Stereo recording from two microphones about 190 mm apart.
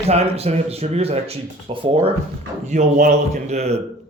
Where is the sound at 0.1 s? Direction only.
35° right (ahead or behind).